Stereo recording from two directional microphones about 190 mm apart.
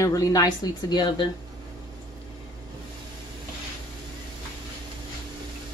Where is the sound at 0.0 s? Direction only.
15° left (ahead or behind).